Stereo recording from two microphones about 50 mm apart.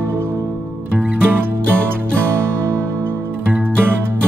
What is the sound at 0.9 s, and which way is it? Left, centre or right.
Music, right.